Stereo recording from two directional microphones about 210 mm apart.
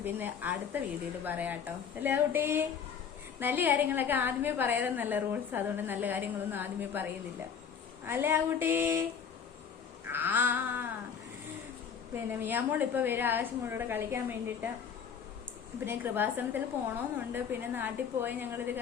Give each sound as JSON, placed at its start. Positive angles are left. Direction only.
{"t": 0.0, "sound": "a woman's voice", "side_deg": -10}
{"t": 10.1, "sound": "a woman's voice", "side_deg": -10}
{"t": 12.1, "sound": "a woman's voice", "side_deg": -10}
{"t": 15.8, "sound": "a woman's voice", "side_deg": -10}